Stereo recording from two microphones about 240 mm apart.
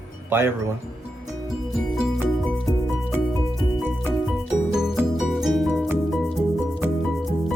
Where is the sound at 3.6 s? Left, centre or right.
Centre.